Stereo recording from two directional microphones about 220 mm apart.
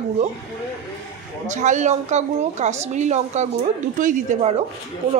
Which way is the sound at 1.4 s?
35° right (ahead or behind).